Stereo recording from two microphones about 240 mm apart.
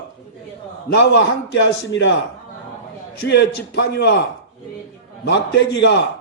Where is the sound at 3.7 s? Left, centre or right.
Left.